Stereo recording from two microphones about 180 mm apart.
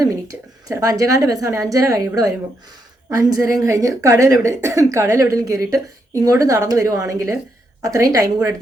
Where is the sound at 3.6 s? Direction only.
15° right (ahead or behind).